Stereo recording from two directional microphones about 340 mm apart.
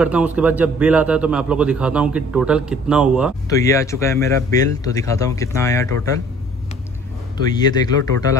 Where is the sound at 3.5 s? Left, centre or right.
Centre.